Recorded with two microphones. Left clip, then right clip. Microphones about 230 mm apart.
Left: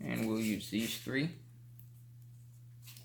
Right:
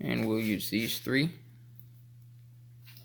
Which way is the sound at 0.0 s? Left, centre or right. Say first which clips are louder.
Right 6 dB; right.